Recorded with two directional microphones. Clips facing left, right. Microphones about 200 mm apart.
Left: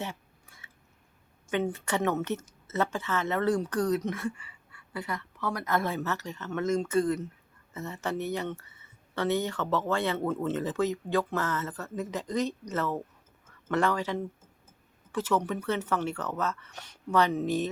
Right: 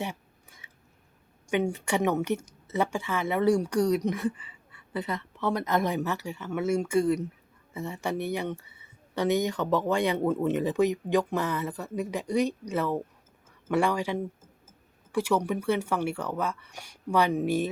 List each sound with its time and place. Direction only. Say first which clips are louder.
0.0 s chewing: right 3 dB; 15° right (ahead or behind)
1.5 s a woman's voice: right 2 dB; 15° right (ahead or behind)